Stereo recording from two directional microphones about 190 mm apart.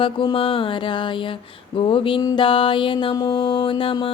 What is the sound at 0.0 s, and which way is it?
Music, 25° left (ahead or behind).